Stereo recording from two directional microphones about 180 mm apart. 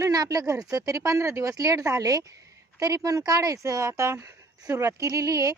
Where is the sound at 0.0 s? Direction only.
20° right (ahead or behind).